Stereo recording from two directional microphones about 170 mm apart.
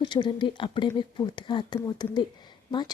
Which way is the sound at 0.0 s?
30° left (ahead or behind).